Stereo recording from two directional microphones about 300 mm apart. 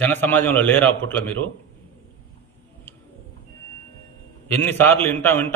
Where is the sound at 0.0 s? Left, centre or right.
Centre.